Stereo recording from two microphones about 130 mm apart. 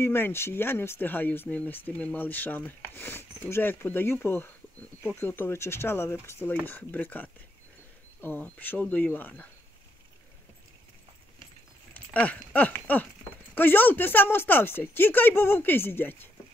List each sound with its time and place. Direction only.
0.0 s speech: 20° left (ahead or behind)
11.9 s speech: 10° left (ahead or behind)